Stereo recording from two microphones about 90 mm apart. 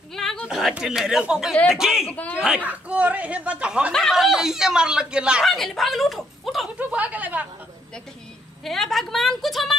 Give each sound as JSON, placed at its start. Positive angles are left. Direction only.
{"t": 0.1, "sound": "a sound", "side_deg": 5}
{"t": 0.5, "sound": "a woman's voice", "side_deg": -5}
{"t": 2.0, "sound": "speech", "side_deg": 20}
{"t": 2.4, "sound": "speech", "side_deg": -15}
{"t": 3.9, "sound": "speech", "side_deg": 0}
{"t": 5.4, "sound": "speech", "side_deg": 0}
{"t": 6.8, "sound": "a woman's voice", "side_deg": -15}
{"t": 8.6, "sound": "a woman's voice", "side_deg": 5}